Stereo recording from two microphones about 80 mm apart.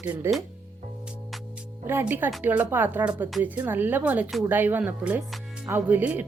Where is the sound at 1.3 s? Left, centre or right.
Centre.